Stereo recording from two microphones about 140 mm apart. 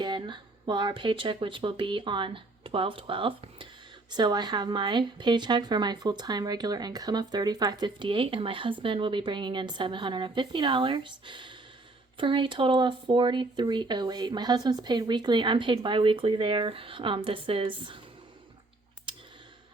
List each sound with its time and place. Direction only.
0.0 s a woman's voice: 35° right (ahead or behind)